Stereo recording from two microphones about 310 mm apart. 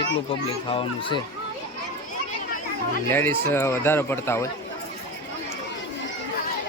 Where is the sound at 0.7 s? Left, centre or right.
Centre.